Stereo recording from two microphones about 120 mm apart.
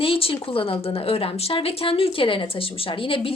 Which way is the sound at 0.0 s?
50° left (ahead or behind).